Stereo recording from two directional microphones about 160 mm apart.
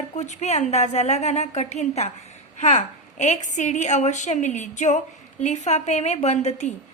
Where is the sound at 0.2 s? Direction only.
45° left (ahead or behind).